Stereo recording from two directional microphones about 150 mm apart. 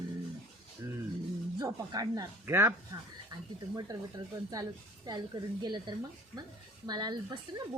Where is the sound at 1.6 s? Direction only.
25° right (ahead or behind).